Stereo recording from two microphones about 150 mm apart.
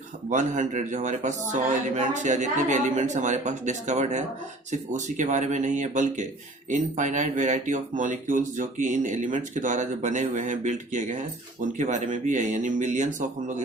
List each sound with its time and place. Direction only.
0.3 s speech: 55° right (ahead or behind)